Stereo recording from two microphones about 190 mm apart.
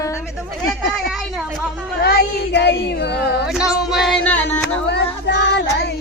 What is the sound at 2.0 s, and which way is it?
Speech, 60° left (ahead or behind).